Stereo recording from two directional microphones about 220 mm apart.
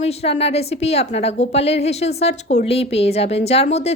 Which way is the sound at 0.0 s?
30° left (ahead or behind).